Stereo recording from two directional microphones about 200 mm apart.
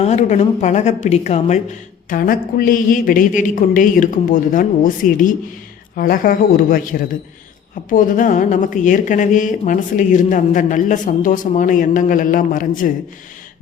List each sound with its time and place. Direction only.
0.0 s speech: 35° left (ahead or behind)
7.9 s speech: 40° left (ahead or behind)